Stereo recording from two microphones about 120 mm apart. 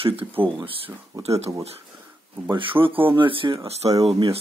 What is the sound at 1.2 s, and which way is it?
Speech, 60° right (ahead or behind).